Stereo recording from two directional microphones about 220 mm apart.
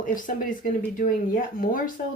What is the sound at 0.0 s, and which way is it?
Speech, 35° left (ahead or behind).